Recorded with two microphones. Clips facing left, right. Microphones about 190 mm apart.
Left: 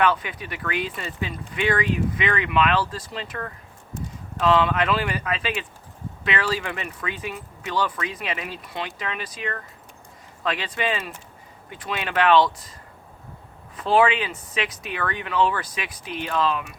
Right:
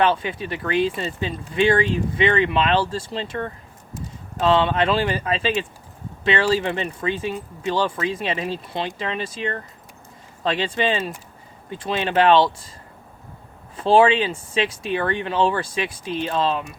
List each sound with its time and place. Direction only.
0.0 s speech: 30° right (ahead or behind)
13.7 s speech: 30° right (ahead or behind)